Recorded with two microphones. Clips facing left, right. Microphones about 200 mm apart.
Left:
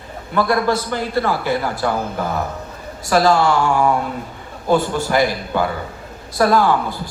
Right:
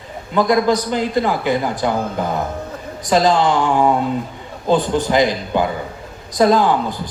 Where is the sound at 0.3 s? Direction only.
20° right (ahead or behind).